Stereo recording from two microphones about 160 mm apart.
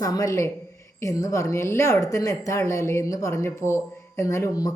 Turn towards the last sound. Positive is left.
turn(degrees=20)  # may be behind; listen again after turning